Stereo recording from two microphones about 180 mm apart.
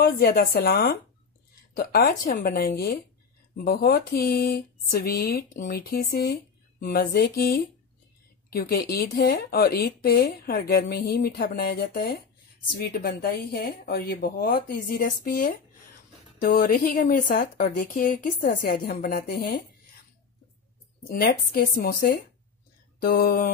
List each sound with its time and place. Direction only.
0.0 s a woman's voice: 55° left (ahead or behind)
21.1 s speech: 55° left (ahead or behind)